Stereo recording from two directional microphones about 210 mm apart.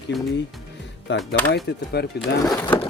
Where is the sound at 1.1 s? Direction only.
55° left (ahead or behind).